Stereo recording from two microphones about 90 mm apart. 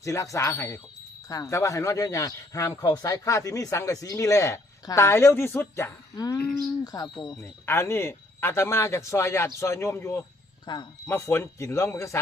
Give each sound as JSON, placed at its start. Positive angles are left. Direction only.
{"t": 0.0, "sound": "a man's voice", "side_deg": 35}
{"t": 6.1, "sound": "speech", "side_deg": 45}
{"t": 7.6, "sound": "a man's voice", "side_deg": 30}
{"t": 10.7, "sound": "speech", "side_deg": 55}
{"t": 11.0, "sound": "a man's voice", "side_deg": 30}